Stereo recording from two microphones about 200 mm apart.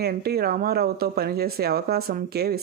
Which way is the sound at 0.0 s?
50° right (ahead or behind).